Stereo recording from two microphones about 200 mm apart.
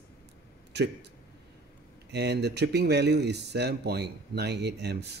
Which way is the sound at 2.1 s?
55° right (ahead or behind).